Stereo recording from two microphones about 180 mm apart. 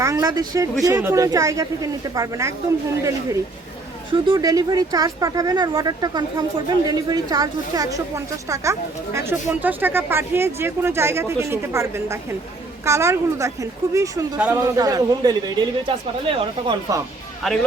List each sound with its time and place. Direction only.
0.0 s speech: 20° right (ahead or behind)
4.1 s speech: 25° right (ahead or behind)
14.3 s speech: 5° right (ahead or behind)
14.6 s speech: 20° right (ahead or behind)
17.4 s speech: centre (ahead or behind)